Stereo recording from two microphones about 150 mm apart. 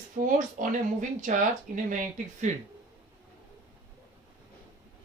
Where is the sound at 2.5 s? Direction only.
55° right (ahead or behind).